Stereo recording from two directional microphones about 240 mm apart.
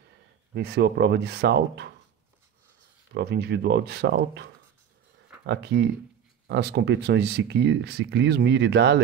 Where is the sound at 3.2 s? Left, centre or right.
Right.